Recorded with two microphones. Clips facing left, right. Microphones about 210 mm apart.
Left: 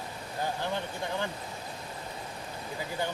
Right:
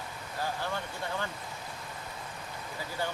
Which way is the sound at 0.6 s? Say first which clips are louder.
Left 3 dB; 20° left (ahead or behind).